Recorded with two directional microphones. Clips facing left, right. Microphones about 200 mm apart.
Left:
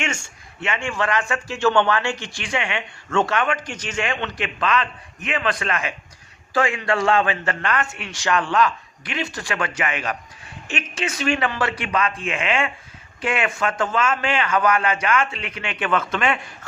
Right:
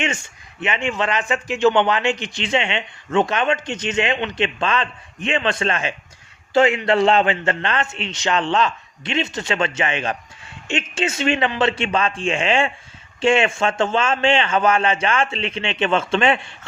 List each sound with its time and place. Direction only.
0.6 s a man's voice: 20° right (ahead or behind)